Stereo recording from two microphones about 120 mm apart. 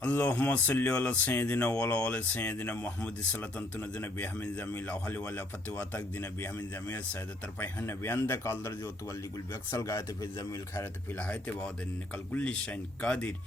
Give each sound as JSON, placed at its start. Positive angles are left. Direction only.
{"t": 0.0, "sound": "a man's voice", "side_deg": 10}
{"t": 12.1, "sound": "speech", "side_deg": 10}